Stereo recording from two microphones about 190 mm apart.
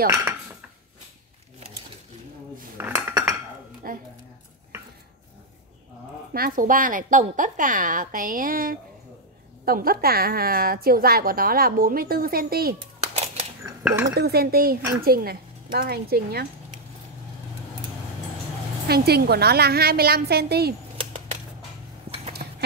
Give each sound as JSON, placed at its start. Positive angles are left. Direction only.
{"t": 0.0, "sound": "cutlery", "side_deg": -15}
{"t": 2.8, "sound": "cutlery", "side_deg": -15}
{"t": 3.8, "sound": "a sound", "side_deg": -50}
{"t": 6.3, "sound": "a woman's voice", "side_deg": -50}
{"t": 13.0, "sound": "cat", "side_deg": -30}
{"t": 13.8, "sound": "speech", "side_deg": -10}
{"t": 14.1, "sound": "a woman's voice", "side_deg": -55}
{"t": 18.9, "sound": "a woman's voice", "side_deg": -55}
{"t": 21.0, "sound": "a sound", "side_deg": -30}